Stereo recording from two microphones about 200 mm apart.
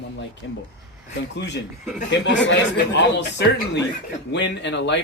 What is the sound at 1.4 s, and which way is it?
Speech, 60° left (ahead or behind).